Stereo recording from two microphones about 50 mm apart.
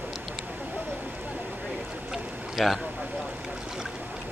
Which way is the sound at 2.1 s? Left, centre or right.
Centre.